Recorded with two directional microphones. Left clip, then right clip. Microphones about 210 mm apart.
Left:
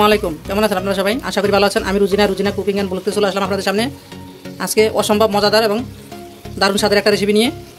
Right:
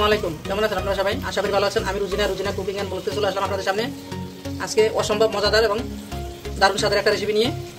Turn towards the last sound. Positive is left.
turn(degrees=50)  # may be behind; listen again after turning